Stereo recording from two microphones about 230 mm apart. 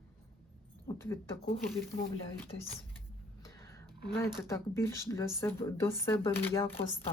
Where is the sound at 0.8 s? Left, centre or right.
Centre.